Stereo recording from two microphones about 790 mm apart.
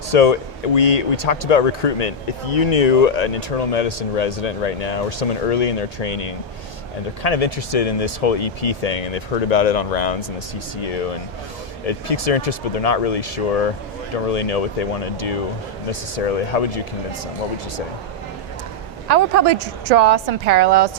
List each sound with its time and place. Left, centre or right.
0.1 s speech: left
19.0 s a woman's voice: right